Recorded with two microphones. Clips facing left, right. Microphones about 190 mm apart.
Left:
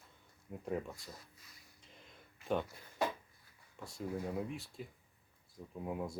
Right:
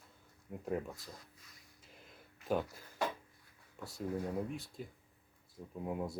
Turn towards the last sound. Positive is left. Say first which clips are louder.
# right 1 dB
turn(degrees=0)  # may be behind; listen again after turning